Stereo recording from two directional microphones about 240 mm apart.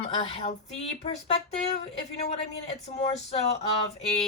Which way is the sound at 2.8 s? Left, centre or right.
Left.